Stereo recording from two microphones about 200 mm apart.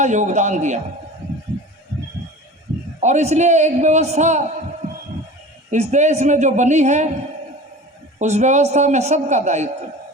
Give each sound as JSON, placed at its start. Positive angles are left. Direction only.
{"t": 0.0, "sound": "a man's voice", "side_deg": -35}
{"t": 3.0, "sound": "a man's voice", "side_deg": -35}
{"t": 5.7, "sound": "a man's voice", "side_deg": -35}
{"t": 8.2, "sound": "a man's voice", "side_deg": -35}